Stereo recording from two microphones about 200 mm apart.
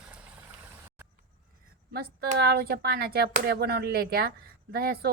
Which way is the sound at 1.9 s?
50° right (ahead or behind).